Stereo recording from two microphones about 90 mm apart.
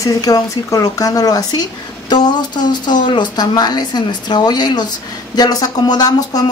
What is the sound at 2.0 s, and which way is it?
Speech, 55° left (ahead or behind).